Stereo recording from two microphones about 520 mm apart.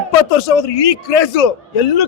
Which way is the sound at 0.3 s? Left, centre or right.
Left.